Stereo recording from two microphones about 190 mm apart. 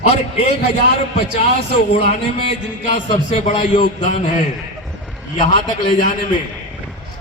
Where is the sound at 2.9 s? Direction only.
35° left (ahead or behind).